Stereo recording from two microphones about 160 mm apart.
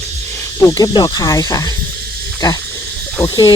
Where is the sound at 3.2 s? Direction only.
20° left (ahead or behind).